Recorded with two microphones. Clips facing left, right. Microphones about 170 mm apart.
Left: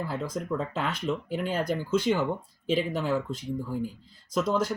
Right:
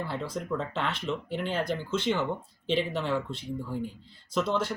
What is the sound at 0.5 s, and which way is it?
Speech, 5° left (ahead or behind).